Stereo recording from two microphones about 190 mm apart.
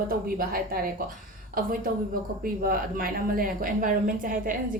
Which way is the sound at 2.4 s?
50° right (ahead or behind).